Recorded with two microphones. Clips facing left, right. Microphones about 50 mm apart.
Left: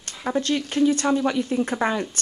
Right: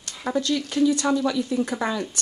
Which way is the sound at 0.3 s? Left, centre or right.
Left.